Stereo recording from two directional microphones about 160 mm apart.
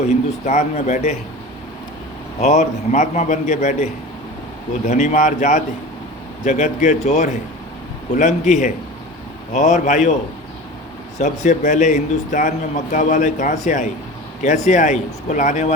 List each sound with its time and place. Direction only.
0.0 s a man's voice: 45° left (ahead or behind)
2.4 s a man's voice: 45° left (ahead or behind)
4.9 s a man's voice: 45° left (ahead or behind)
11.2 s a man's voice: 50° left (ahead or behind)